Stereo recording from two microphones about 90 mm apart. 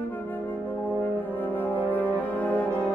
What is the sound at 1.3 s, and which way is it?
Brass instrument, 20° left (ahead or behind).